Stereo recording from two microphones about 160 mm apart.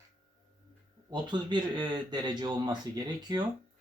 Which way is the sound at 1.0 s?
25° right (ahead or behind).